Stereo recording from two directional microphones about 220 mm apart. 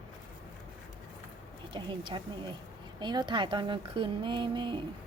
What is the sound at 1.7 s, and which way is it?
A woman's voice, 20° right (ahead or behind).